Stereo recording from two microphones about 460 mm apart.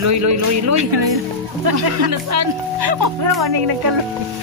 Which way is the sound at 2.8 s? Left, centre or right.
Right.